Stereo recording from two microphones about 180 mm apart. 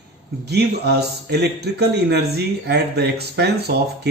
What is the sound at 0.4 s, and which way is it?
Speech, 65° right (ahead or behind).